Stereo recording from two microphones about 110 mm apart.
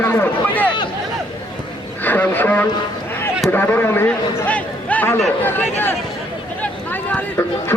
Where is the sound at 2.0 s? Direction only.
15° left (ahead or behind).